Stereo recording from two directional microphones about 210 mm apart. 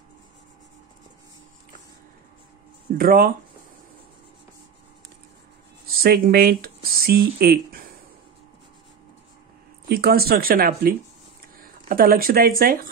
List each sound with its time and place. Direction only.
3.0 s speech: 45° right (ahead or behind)
5.9 s speech: 45° right (ahead or behind)
9.8 s speech: 50° right (ahead or behind)